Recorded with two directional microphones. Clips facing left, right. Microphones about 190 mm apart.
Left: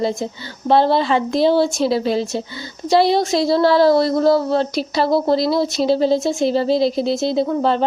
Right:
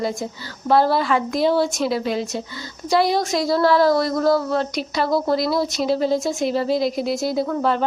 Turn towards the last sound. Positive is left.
turn(degrees=30)  # may be behind; listen again after turning